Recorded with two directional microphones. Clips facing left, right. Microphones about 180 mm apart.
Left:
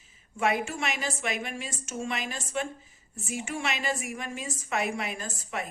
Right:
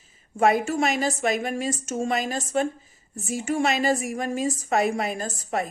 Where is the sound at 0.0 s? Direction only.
40° right (ahead or behind).